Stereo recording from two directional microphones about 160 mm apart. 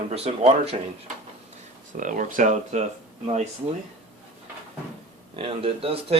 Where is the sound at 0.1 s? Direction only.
40° right (ahead or behind).